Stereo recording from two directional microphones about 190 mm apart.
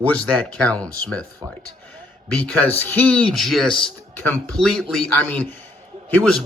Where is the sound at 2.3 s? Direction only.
10° left (ahead or behind).